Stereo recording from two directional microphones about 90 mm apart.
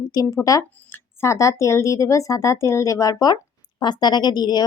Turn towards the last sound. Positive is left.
turn(degrees=50)  # may be behind; listen again after turning